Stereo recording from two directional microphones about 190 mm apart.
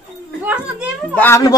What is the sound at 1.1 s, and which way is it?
Speech, 10° left (ahead or behind).